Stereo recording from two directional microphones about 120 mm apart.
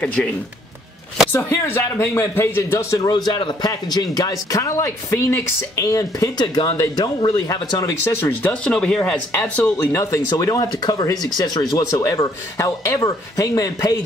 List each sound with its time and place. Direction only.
0.0 s speech: 10° left (ahead or behind)
1.3 s speech: 20° left (ahead or behind)
3.1 s speech: 35° left (ahead or behind)
8.1 s speech: 20° left (ahead or behind)
9.4 s speech: 20° left (ahead or behind)